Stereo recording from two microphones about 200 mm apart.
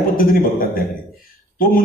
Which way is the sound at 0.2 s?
45° left (ahead or behind).